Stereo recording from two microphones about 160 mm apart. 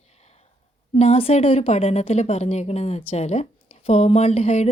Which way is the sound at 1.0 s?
40° left (ahead or behind).